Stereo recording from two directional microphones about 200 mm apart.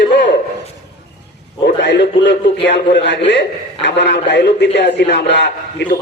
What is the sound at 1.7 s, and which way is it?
A man's voice, 60° left (ahead or behind).